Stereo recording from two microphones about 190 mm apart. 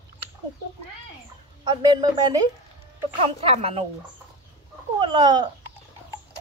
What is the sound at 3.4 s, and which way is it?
Speech, 30° right (ahead or behind).